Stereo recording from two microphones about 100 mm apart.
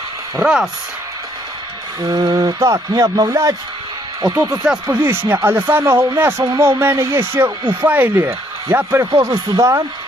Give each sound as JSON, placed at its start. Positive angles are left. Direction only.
{"t": 0.4, "sound": "speech", "side_deg": -5}
{"t": 2.0, "sound": "speech", "side_deg": -40}
{"t": 4.5, "sound": "speech", "side_deg": -15}
{"t": 6.4, "sound": "speech", "side_deg": -35}